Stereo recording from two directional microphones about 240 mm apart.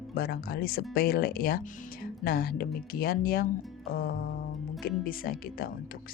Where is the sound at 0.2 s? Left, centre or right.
Left.